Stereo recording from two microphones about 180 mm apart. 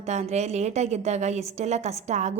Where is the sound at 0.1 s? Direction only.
40° right (ahead or behind).